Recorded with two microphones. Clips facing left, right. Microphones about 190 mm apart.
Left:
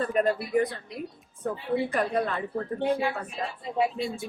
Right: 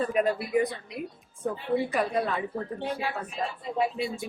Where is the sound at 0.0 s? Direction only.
5° right (ahead or behind).